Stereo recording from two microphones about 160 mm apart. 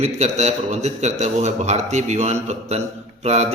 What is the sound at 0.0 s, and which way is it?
A man's voice, 45° right (ahead or behind).